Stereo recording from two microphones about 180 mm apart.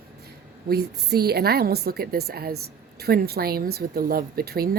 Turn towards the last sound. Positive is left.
turn(degrees=-60)  # may be behind; listen again after turning